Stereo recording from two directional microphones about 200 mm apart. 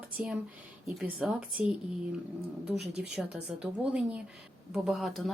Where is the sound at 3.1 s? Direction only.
5° right (ahead or behind).